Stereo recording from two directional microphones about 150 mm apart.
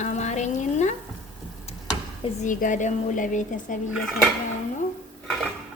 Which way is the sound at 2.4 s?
60° left (ahead or behind).